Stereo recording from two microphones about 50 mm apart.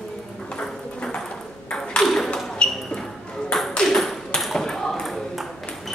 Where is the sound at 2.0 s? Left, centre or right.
Centre.